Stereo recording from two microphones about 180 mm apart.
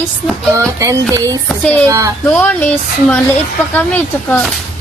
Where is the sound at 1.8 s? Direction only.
15° right (ahead or behind).